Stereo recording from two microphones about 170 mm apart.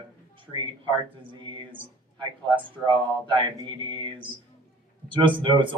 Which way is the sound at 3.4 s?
30° right (ahead or behind).